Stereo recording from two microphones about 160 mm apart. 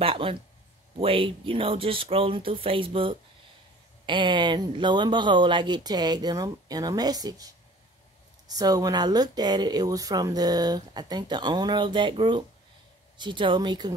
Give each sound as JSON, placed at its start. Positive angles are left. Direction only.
{"t": 0.0, "sound": "speech", "side_deg": -35}